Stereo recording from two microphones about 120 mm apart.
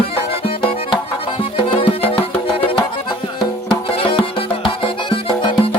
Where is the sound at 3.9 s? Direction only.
50° left (ahead or behind).